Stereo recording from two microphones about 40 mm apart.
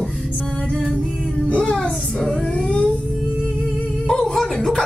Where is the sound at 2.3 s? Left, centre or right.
Left.